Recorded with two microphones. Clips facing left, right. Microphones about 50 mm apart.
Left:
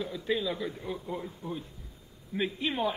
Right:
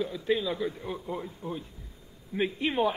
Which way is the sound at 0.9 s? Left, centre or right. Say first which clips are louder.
Right 1 dB; centre.